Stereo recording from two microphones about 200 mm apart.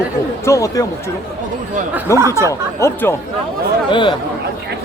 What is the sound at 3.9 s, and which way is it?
Speech, 25° left (ahead or behind).